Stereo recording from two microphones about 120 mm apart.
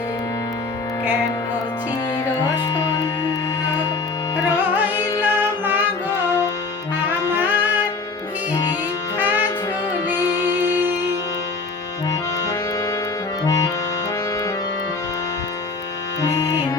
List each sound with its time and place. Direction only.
4.4 s carnatic music: 15° right (ahead or behind)
5.2 s music: 15° right (ahead or behind)
7.3 s music: 15° right (ahead or behind)
9.1 s music: 15° right (ahead or behind)
13.4 s accordion: 25° left (ahead or behind)
16.2 s music: 30° left (ahead or behind)